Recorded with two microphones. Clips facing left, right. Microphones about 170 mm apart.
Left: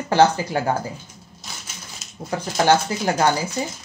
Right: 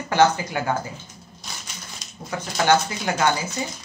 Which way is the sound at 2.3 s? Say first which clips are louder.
Left 2 dB; 35° left (ahead or behind).